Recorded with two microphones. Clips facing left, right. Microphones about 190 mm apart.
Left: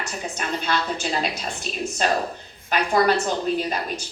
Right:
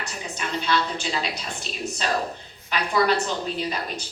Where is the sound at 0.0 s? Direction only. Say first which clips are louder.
Left 3 dB; 45° left (ahead or behind).